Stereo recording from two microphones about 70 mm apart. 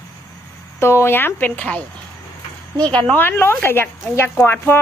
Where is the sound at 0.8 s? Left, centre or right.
Left.